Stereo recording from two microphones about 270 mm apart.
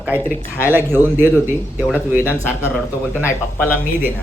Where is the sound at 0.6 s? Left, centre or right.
Centre.